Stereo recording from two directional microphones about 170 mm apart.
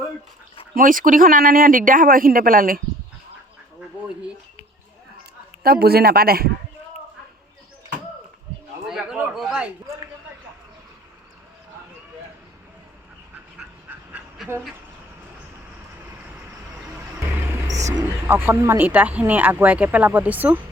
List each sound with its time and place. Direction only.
0.8 s speech: 50° right (ahead or behind)
5.6 s speech: 65° right (ahead or behind)
8.9 s a sound: 5° right (ahead or behind)
14.1 s dog: 10° right (ahead or behind)
17.7 s speech: 20° right (ahead or behind)